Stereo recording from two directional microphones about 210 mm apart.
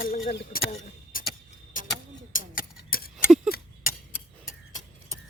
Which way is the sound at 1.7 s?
40° left (ahead or behind).